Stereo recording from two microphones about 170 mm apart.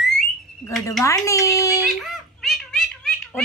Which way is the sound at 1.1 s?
20° left (ahead or behind).